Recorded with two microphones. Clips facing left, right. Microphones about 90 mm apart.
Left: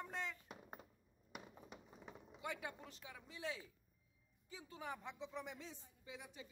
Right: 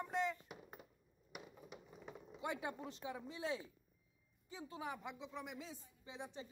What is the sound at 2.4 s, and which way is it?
A woman's voice, 25° right (ahead or behind).